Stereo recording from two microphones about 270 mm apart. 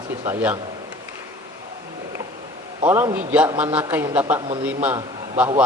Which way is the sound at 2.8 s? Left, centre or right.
Centre.